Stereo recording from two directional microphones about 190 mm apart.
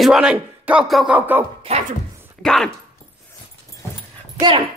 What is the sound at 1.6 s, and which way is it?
Speech, 35° right (ahead or behind).